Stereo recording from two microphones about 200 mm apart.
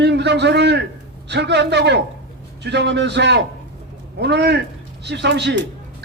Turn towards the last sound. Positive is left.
turn(degrees=-60)  # may be behind; listen again after turning